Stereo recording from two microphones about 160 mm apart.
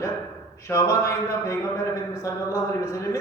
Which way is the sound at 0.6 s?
20° left (ahead or behind).